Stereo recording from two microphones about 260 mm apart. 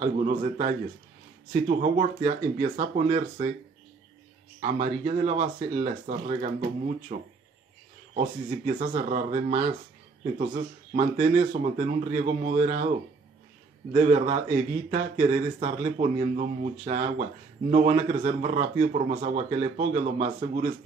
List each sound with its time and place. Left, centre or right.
0.0 s speech: right
4.6 s speech: right
13.9 s speech: right